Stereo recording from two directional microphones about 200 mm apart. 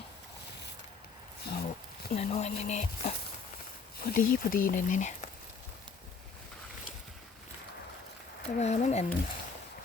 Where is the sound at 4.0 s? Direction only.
45° left (ahead or behind).